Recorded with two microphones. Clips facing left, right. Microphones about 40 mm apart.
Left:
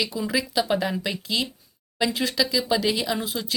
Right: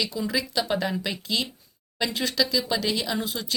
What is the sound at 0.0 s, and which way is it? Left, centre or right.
Speech, centre.